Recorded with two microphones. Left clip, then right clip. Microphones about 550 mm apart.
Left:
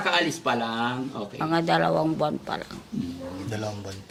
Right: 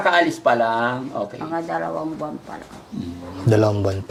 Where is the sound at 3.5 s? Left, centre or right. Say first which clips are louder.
Right 18 dB; right.